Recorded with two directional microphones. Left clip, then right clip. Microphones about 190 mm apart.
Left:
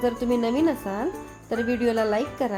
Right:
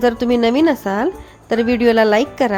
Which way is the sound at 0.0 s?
30° right (ahead or behind).